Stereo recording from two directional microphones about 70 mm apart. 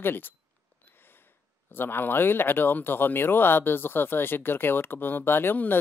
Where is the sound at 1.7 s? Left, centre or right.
Left.